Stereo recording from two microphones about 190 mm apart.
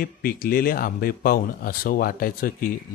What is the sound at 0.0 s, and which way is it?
Speech, 50° left (ahead or behind).